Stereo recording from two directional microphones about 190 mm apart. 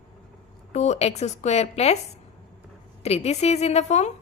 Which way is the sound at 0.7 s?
35° left (ahead or behind).